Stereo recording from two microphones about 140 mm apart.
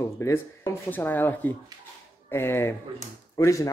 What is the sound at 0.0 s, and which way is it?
Speech, 20° left (ahead or behind).